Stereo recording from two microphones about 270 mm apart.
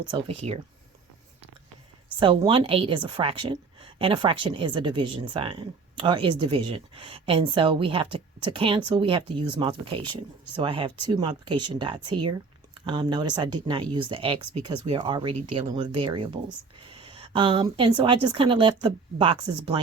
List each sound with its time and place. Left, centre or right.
0.1 s a woman's voice: centre
2.1 s a woman's voice: centre